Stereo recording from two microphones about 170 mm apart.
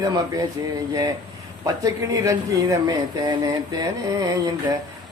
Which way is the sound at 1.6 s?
20° right (ahead or behind).